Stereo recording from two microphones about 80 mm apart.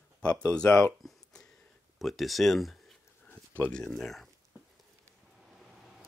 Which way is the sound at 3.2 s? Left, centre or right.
Left.